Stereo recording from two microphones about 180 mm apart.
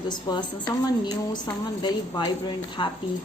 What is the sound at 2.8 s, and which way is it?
Speech, 25° left (ahead or behind).